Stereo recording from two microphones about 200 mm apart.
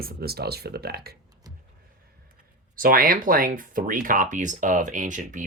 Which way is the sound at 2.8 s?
45° right (ahead or behind).